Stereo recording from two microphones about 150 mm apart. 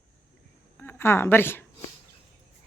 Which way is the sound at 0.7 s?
15° left (ahead or behind).